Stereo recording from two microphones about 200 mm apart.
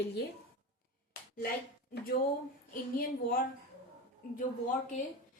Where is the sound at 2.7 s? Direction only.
45° left (ahead or behind).